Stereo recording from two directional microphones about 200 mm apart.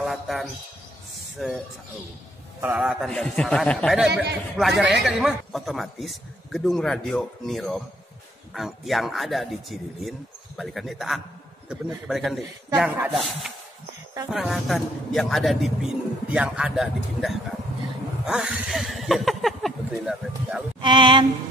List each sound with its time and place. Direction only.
0.0 s bird: centre (ahead or behind)
1.4 s a man's voice: centre (ahead or behind)
2.6 s a man's voice: 5° right (ahead or behind)
4.1 s speech: 55° right (ahead or behind)
4.6 s a man's voice: centre (ahead or behind)
14.3 s a man's voice: centre (ahead or behind)
20.8 s music: 25° right (ahead or behind)